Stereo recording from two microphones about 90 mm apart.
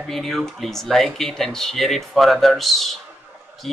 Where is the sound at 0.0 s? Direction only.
Centre (ahead or behind).